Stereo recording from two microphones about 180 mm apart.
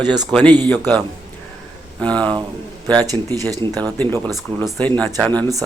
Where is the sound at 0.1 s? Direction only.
25° right (ahead or behind).